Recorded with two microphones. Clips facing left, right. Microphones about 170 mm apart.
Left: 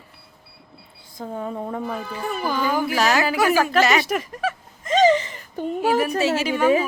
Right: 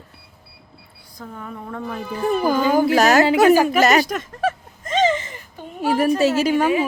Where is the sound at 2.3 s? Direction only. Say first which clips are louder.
Right 6 dB; 40° right (ahead or behind).